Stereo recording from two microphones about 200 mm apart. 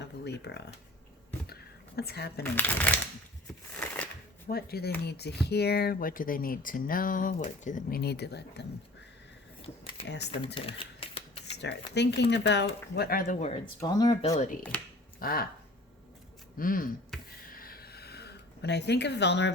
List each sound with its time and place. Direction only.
0.0 s speech: 60° left (ahead or behind)
2.0 s speech: 50° left (ahead or behind)
2.4 s speech: 10° left (ahead or behind)
3.8 s shuffling cards: 5° left (ahead or behind)
4.4 s speech: 50° left (ahead or behind)
9.8 s a sound: 55° left (ahead or behind)
10.4 s a sound: 25° left (ahead or behind)
11.5 s speech: 55° left (ahead or behind); by 13.6 s 35° left (ahead or behind)
13.8 s speech: 20° left (ahead or behind)
14.7 s speech: 5° left (ahead or behind)
15.2 s speech: 45° left (ahead or behind)
16.6 s speech: 45° left (ahead or behind)
17.1 s a sound: centre (ahead or behind)
17.5 s a sound: 45° left (ahead or behind)